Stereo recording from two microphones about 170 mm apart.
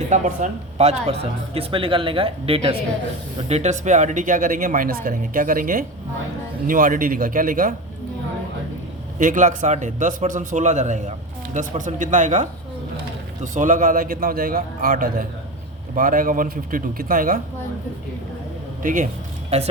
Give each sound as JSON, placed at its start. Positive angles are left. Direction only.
{"t": 0.1, "sound": "speech", "side_deg": -40}
{"t": 9.1, "sound": "speech", "side_deg": -50}
{"t": 18.8, "sound": "speech", "side_deg": -50}